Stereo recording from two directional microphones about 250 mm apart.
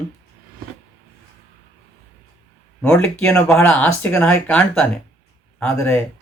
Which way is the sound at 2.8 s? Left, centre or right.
Centre.